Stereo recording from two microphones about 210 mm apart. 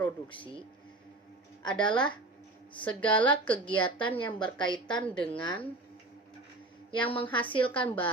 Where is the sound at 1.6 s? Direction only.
20° left (ahead or behind).